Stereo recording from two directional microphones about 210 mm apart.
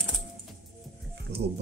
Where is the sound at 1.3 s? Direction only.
50° right (ahead or behind).